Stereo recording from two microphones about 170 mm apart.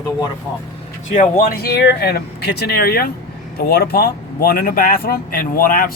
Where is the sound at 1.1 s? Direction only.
50° left (ahead or behind).